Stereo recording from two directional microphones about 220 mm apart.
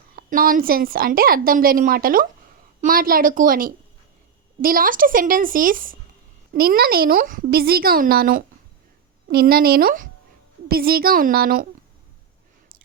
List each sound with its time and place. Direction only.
0.2 s a woman's voice: 40° right (ahead or behind)